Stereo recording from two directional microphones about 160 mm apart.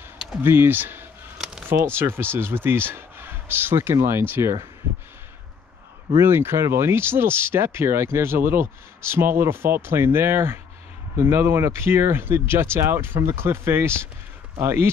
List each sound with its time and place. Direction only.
0.4 s speech: 15° right (ahead or behind)
6.2 s speech: 15° right (ahead or behind)